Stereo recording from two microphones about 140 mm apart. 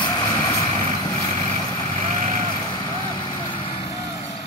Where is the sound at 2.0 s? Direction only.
50° right (ahead or behind).